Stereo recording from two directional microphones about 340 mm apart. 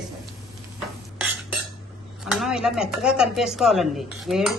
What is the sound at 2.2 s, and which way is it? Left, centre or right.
Speech, centre.